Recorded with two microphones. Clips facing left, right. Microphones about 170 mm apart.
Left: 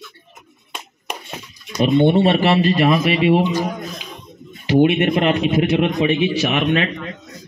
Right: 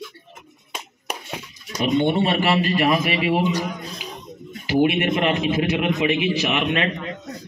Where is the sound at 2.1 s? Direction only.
40° left (ahead or behind).